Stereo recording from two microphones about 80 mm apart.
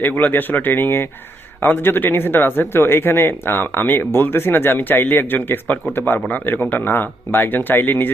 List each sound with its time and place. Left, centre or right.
0.0 s speech: left